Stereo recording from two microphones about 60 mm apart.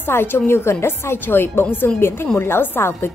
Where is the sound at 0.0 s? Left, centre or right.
Left.